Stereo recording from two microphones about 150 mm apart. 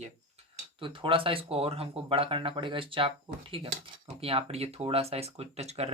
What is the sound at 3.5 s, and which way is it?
Cutlery, 40° right (ahead or behind).